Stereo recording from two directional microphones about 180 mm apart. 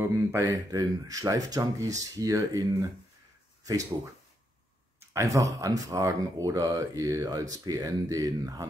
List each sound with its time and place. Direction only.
0.0 s speech: 15° right (ahead or behind)
5.1 s speech: 15° right (ahead or behind)